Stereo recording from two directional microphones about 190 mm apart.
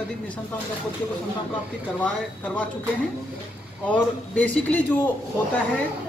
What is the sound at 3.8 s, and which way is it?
Speech, 5° left (ahead or behind).